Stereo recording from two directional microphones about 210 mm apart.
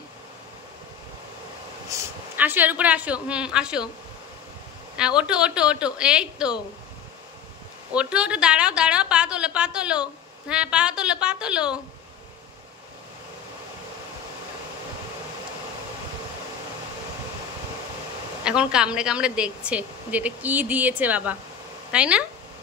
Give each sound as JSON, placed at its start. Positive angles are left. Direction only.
{"t": 1.9, "sound": "speech", "side_deg": -10}
{"t": 4.9, "sound": "a woman's voice", "side_deg": -5}
{"t": 7.9, "sound": "a woman's voice", "side_deg": -5}
{"t": 18.4, "sound": "a woman's voice", "side_deg": -5}